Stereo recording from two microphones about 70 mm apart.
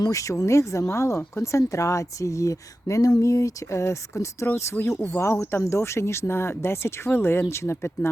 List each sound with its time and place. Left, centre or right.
0.0 s speech: left